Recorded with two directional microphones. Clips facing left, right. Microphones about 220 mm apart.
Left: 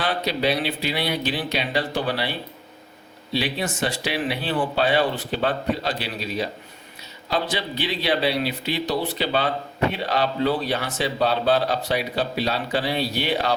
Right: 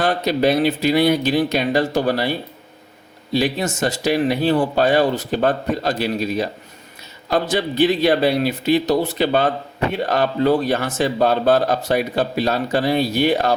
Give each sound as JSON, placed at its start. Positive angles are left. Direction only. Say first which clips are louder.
{"t": 0.0, "sound": "speech", "louder": "right 6 dB", "side_deg": -45}
{"t": 3.3, "sound": "speech", "louder": "right 6 dB", "side_deg": -45}